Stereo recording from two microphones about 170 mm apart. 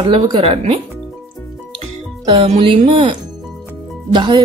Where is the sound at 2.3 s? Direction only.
35° right (ahead or behind).